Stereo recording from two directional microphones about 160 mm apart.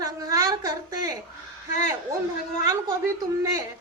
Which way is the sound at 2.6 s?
20° right (ahead or behind).